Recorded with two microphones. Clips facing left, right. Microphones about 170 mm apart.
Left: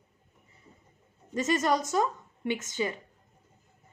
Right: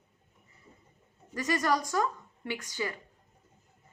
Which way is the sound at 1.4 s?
25° left (ahead or behind).